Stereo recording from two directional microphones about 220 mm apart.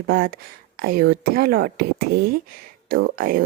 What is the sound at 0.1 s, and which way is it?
A woman's voice, 40° right (ahead or behind).